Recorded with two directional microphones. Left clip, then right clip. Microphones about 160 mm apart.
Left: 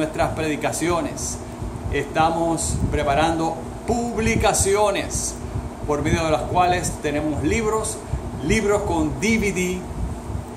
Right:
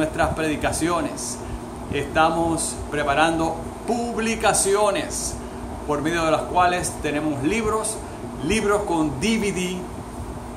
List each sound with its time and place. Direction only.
0.0 s a man's voice: centre (ahead or behind)